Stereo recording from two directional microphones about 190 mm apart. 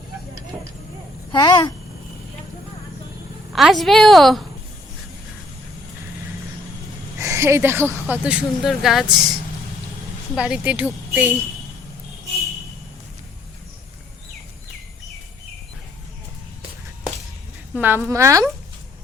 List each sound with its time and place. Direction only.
1.3 s speech: 25° left (ahead or behind)
3.5 s a woman's voice: centre (ahead or behind)
7.2 s a woman's voice: 15° right (ahead or behind)
17.7 s speech: 10° right (ahead or behind)